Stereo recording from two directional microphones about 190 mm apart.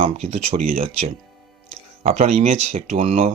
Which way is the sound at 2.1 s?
35° right (ahead or behind).